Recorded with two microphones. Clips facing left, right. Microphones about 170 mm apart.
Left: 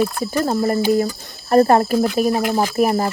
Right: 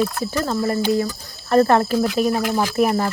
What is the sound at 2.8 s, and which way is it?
Speech, 35° left (ahead or behind).